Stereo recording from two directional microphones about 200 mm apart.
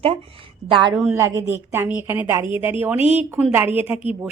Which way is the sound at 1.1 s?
15° right (ahead or behind).